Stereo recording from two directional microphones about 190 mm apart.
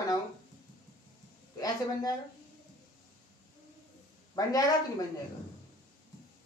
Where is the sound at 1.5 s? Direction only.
20° left (ahead or behind).